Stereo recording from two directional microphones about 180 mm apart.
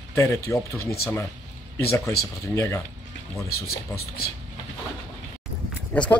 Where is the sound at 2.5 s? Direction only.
15° left (ahead or behind).